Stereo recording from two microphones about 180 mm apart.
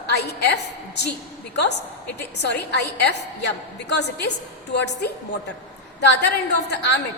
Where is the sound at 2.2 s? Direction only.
65° left (ahead or behind).